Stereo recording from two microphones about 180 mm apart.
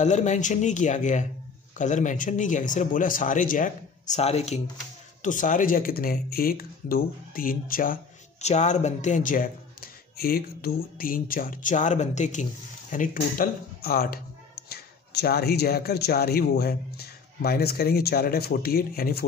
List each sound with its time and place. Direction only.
0.0 s speech: 40° left (ahead or behind)
5.2 s speech: 45° left (ahead or behind)